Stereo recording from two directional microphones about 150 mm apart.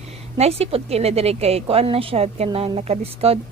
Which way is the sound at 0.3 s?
45° right (ahead or behind).